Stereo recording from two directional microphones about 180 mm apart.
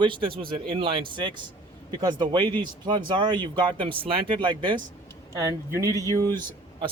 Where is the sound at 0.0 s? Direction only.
30° right (ahead or behind).